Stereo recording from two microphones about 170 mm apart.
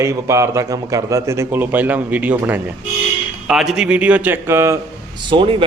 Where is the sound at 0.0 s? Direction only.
15° right (ahead or behind).